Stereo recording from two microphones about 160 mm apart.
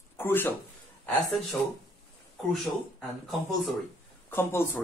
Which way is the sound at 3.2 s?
Centre (ahead or behind).